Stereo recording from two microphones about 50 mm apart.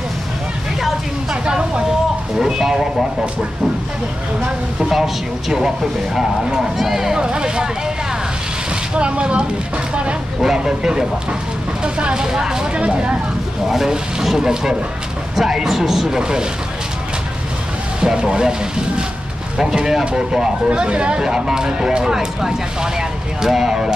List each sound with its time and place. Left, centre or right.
1.3 s vehicle: centre
2.3 s speech: centre
4.7 s speech: centre
6.8 s speech: centre
8.9 s speech: right
13.7 s speech: centre
18.0 s speech: centre